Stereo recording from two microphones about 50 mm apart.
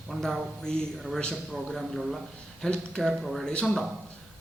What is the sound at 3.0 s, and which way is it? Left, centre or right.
Speech, centre.